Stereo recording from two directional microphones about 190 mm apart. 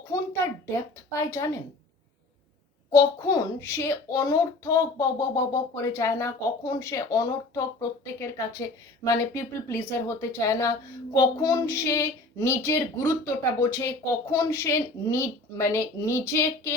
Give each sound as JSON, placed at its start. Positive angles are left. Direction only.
{"t": 0.1, "sound": "speech", "side_deg": 15}
{"t": 2.9, "sound": "a woman's voice", "side_deg": 15}